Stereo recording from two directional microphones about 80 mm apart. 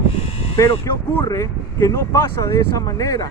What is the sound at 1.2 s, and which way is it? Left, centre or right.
Speech, left.